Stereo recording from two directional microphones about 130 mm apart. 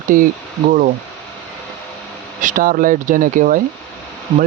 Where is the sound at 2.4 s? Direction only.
85° right.